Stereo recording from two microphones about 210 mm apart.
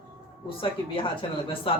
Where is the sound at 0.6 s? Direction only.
25° left (ahead or behind).